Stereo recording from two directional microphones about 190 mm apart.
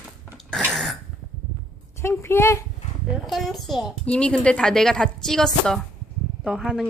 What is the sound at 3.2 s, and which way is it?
A woman's voice, centre (ahead or behind).